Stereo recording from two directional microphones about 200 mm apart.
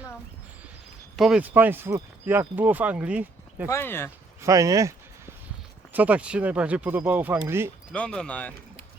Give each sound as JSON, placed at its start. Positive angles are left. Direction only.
{"t": 1.1, "sound": "speech", "side_deg": 0}
{"t": 3.7, "sound": "speech", "side_deg": 10}
{"t": 4.4, "sound": "a sound", "side_deg": -15}
{"t": 5.9, "sound": "speech", "side_deg": -5}
{"t": 7.9, "sound": "speech", "side_deg": 5}